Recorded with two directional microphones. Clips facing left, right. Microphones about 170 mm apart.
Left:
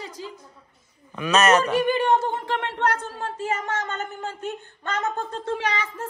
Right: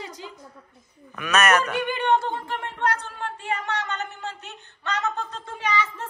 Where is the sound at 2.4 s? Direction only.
80° left.